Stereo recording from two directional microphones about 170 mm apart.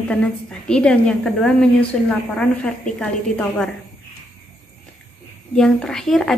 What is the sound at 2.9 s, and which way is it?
Speech, 5° left (ahead or behind).